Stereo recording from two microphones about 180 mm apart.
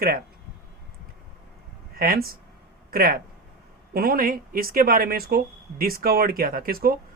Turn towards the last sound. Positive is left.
turn(degrees=-55)  # may be behind; listen again after turning